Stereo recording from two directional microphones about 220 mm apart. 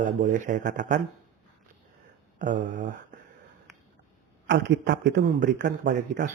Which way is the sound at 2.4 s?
35° right (ahead or behind).